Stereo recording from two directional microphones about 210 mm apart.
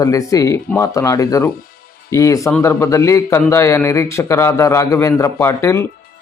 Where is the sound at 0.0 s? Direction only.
15° left (ahead or behind).